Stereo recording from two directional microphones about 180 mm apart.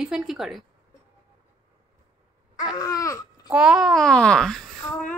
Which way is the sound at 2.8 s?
20° left (ahead or behind).